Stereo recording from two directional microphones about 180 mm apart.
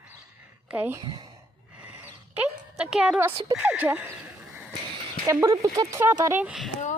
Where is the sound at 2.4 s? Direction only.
5° right (ahead or behind).